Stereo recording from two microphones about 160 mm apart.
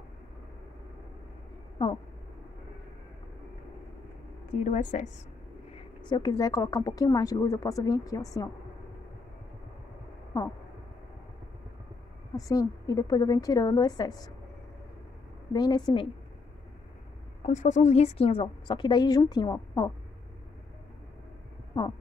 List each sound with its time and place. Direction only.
4.5 s a woman's voice: 50° left (ahead or behind)
6.0 s a woman's voice: 25° left (ahead or behind)
12.4 s a woman's voice: 20° left (ahead or behind)
15.5 s a woman's voice: 25° left (ahead or behind)
17.4 s a woman's voice: 50° left (ahead or behind); by 19.9 s 25° left (ahead or behind)
21.7 s a woman's voice: 25° left (ahead or behind)